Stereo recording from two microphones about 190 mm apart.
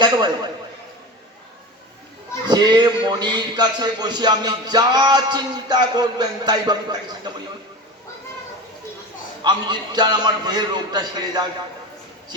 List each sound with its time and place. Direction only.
0.0 s music: 25° right (ahead or behind)
2.5 s music: 20° right (ahead or behind)
9.4 s music: 20° right (ahead or behind)